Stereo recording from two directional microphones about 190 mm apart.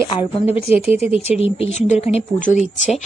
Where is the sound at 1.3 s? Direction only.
30° left (ahead or behind).